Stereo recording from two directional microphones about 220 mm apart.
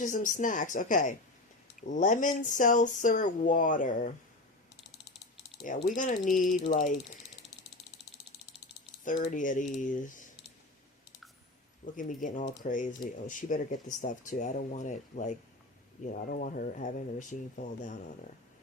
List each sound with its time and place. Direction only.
0.0 s speech: 35° left (ahead or behind)
5.6 s speech: 35° left (ahead or behind)
9.3 s speech: 35° left (ahead or behind)
11.9 s speech: 35° left (ahead or behind)